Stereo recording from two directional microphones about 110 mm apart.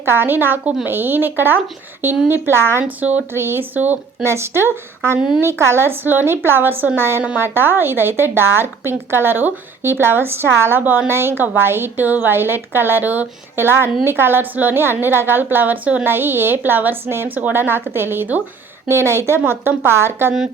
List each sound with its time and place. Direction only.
0.0 s a woman's voice: 20° right (ahead or behind)